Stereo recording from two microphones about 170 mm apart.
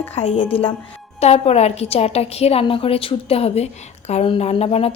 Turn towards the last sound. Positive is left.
turn(degrees=35)  # may be behind; listen again after turning